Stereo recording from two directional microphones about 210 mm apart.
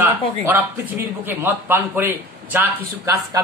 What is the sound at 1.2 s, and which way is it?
A man's voice, 10° right (ahead or behind).